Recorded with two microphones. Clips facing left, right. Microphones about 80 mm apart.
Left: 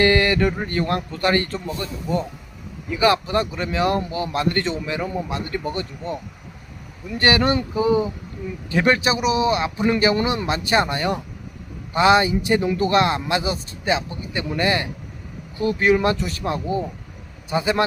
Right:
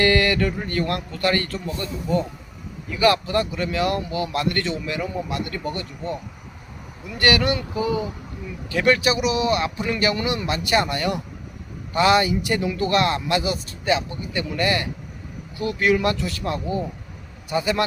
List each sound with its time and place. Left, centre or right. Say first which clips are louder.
0.0 s a man's voice: left 2 dB; left
7.2 s a man's voice: left 2 dB; left